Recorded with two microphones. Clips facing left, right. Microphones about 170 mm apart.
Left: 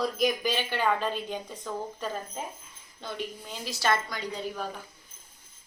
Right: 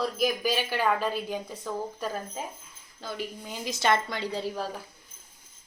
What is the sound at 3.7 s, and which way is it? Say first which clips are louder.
A woman's voice: right 2 dB; 20° right (ahead or behind).